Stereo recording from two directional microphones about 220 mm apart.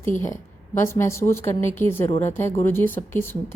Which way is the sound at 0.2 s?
10° left (ahead or behind).